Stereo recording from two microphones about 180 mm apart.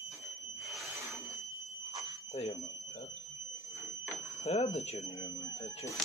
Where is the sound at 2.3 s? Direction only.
35° left (ahead or behind).